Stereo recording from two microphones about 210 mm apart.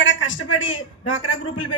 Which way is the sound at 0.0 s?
65° left (ahead or behind).